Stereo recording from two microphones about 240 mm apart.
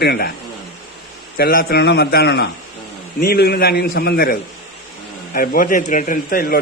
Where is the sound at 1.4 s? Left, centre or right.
Left.